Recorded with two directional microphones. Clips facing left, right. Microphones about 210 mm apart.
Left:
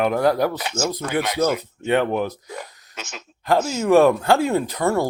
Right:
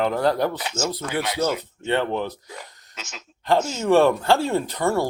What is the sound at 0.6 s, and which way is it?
Speech, 60° left (ahead or behind).